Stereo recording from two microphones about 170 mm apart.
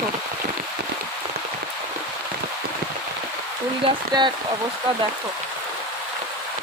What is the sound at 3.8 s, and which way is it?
Speech, 25° right (ahead or behind).